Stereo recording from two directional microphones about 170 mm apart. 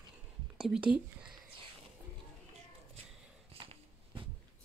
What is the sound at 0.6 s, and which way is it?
Speech, 5° right (ahead or behind).